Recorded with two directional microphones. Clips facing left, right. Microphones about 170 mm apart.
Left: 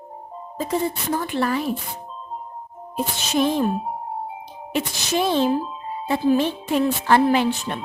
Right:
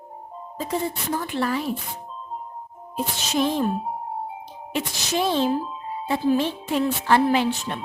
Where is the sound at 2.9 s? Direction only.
55° left (ahead or behind).